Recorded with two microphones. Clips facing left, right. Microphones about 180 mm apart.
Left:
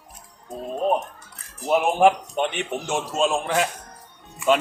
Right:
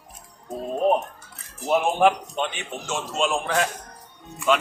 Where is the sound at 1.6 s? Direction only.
10° left (ahead or behind).